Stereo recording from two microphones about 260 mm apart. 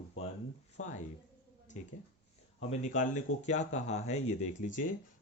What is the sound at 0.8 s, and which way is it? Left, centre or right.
Speech, left.